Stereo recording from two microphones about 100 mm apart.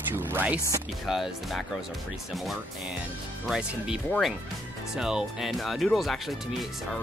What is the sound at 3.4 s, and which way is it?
Speech, 5° right (ahead or behind).